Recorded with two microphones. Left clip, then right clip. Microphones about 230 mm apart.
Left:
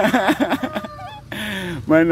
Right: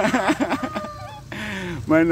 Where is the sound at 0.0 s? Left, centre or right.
Centre.